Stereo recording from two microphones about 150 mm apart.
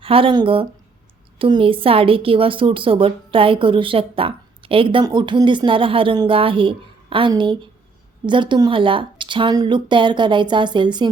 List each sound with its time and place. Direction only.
0.0 s a woman's voice: 35° right (ahead or behind)